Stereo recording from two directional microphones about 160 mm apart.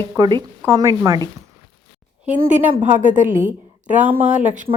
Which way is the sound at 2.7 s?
50° right (ahead or behind).